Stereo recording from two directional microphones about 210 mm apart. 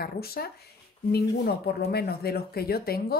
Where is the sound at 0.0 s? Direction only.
45° left (ahead or behind).